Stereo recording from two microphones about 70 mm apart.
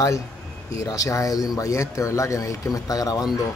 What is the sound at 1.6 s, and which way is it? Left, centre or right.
Speech, left.